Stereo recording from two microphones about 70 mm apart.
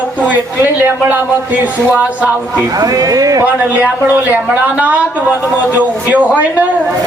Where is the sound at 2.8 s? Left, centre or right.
Right.